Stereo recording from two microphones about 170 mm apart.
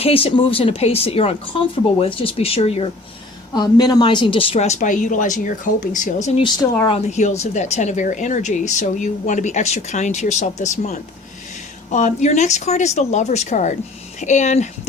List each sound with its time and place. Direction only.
0.0 s speech: 35° left (ahead or behind)
3.5 s speech: 25° left (ahead or behind); by 14.7 s 45° left (ahead or behind)